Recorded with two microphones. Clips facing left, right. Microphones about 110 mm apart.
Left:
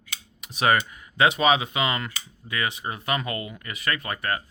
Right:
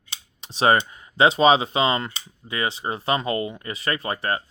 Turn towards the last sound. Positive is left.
turn(degrees=-25)  # may be behind; listen again after turning